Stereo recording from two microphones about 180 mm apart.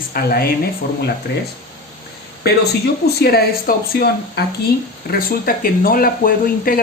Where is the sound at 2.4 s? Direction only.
65° left (ahead or behind).